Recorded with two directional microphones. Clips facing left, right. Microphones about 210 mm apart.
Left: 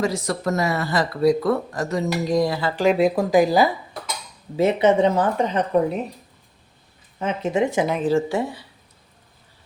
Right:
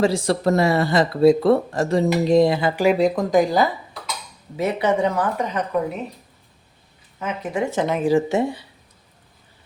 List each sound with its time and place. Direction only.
0.0 s speech: 30° right (ahead or behind)
2.8 s speech: 5° right (ahead or behind)
4.5 s speech: 25° left (ahead or behind)
7.2 s speech: 30° left (ahead or behind)
8.0 s speech: 20° right (ahead or behind)